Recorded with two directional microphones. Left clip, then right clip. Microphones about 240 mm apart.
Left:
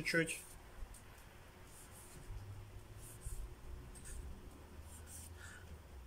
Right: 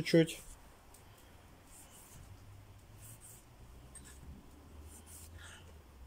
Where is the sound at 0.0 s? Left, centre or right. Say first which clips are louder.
Right 7 dB; right.